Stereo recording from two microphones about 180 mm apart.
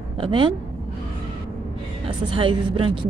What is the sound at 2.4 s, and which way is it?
Speech, 30° right (ahead or behind).